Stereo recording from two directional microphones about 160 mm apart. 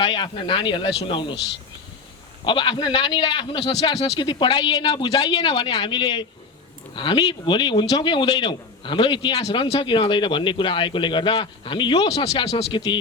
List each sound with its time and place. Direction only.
0.0 s a man's voice: 30° left (ahead or behind)
2.4 s a man's voice: 30° left (ahead or behind)
5.3 s a man's voice: 35° left (ahead or behind)